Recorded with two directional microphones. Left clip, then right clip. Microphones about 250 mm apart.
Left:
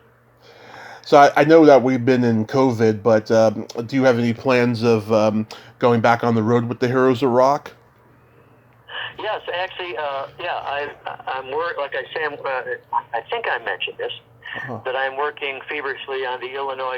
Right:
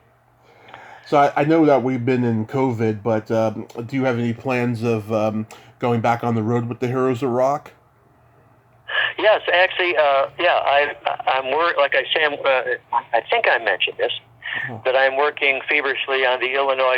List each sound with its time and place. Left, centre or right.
0.8 s speech: centre
8.9 s speech: right